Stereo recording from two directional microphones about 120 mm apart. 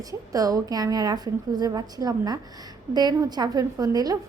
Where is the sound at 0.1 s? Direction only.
30° right (ahead or behind).